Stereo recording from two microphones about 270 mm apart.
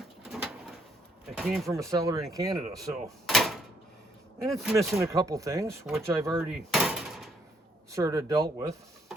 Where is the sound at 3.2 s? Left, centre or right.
Centre.